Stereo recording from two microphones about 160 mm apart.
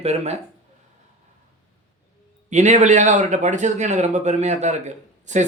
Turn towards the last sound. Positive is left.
turn(degrees=-50)  # may be behind; listen again after turning